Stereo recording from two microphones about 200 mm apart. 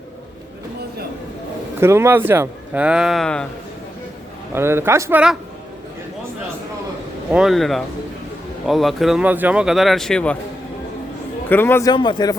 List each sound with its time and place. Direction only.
1.8 s speech: 10° right (ahead or behind)
4.5 s speech: 10° right (ahead or behind)
7.3 s speech: centre (ahead or behind)
11.4 s a man's voice: 10° left (ahead or behind)